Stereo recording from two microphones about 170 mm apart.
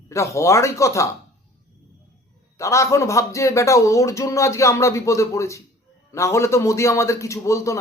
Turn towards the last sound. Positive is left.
turn(degrees=20)  # may be behind; listen again after turning